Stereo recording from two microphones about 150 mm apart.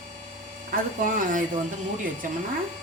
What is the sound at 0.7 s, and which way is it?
Speech, 65° right (ahead or behind).